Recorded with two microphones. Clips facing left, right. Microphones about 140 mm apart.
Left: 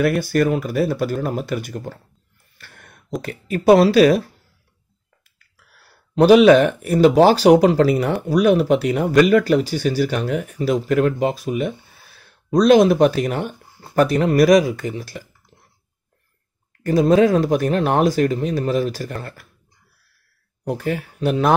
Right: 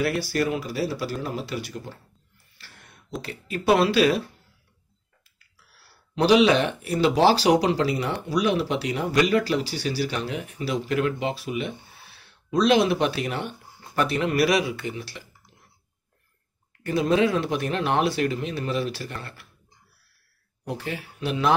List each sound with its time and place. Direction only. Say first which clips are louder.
0.0 s speech: left 7 dB; 50° left (ahead or behind)
2.5 s a sound: left 5 dB; 50° left (ahead or behind)
3.2 s speech: left 7 dB; 50° left (ahead or behind)
5.6 s speech: left 3 dB; 50° left (ahead or behind)
16.8 s speech: left 7 dB; 40° left (ahead or behind)
20.6 s speech: left 8 dB; 45° left (ahead or behind)